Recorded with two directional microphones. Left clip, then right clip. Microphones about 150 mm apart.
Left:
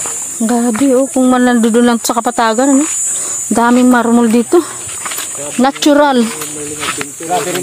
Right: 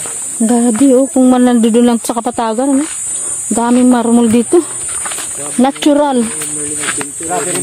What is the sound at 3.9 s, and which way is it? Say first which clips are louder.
Speech: left 1 dB; 15° right (ahead or behind).